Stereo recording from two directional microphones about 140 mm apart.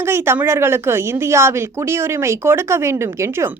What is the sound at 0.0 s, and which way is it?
A woman's voice, 15° right (ahead or behind).